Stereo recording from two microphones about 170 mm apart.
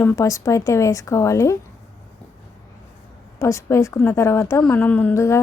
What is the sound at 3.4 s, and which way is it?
A woman's voice, 15° left (ahead or behind).